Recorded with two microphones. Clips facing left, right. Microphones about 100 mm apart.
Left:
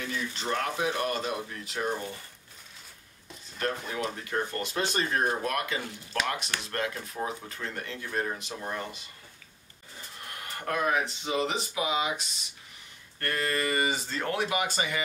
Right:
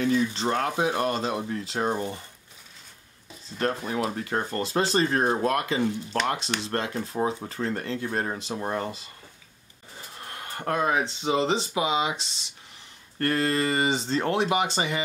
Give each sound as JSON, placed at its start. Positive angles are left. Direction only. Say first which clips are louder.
{"t": 0.0, "sound": "speech", "louder": "right 10 dB", "side_deg": -30}
{"t": 3.5, "sound": "speech", "louder": "right 5 dB", "side_deg": -35}
{"t": 10.2, "sound": "speech", "louder": "right 4 dB", "side_deg": -30}